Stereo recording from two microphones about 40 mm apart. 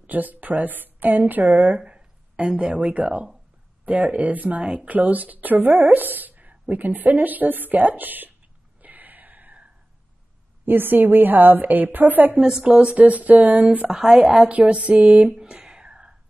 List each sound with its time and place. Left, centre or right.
0.0 s a woman's voice: right
1.9 s a sound: right
2.6 s a woman's voice: right
8.8 s a sound: right
10.6 s a woman's voice: right
12.6 s a woman's voice: right